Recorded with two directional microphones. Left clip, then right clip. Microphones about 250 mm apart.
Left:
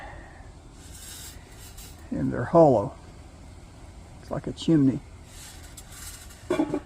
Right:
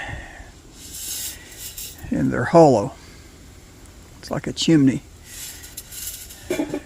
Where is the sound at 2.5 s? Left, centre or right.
Right.